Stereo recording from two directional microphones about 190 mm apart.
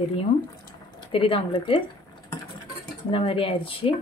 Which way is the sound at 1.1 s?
25° left (ahead or behind).